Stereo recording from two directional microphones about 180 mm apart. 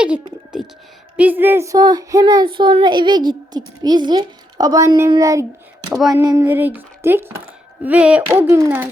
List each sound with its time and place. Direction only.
0.0 s a sound: 5° right (ahead or behind)
1.1 s speech: 10° right (ahead or behind)
5.9 s speech: centre (ahead or behind)
6.2 s speech: 15° right (ahead or behind)